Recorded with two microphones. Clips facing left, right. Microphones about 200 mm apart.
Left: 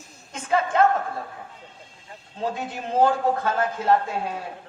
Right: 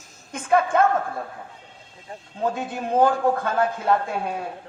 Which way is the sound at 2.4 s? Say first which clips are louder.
Right 3 dB; 55° right (ahead or behind).